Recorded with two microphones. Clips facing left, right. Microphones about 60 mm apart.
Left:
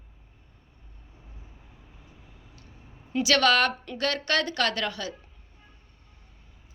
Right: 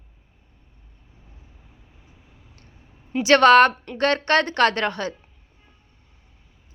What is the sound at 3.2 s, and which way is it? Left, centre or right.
A woman's voice, right.